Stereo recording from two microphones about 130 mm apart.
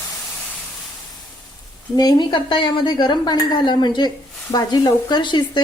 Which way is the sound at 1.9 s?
30° left (ahead or behind).